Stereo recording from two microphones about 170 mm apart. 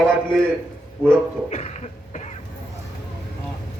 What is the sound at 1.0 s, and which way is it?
Speech, 40° left (ahead or behind).